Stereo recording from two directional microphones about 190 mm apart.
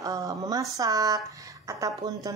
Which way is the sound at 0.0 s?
20° right (ahead or behind).